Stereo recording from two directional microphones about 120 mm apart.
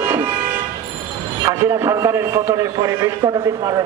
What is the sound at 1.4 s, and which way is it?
A man's voice, 25° right (ahead or behind).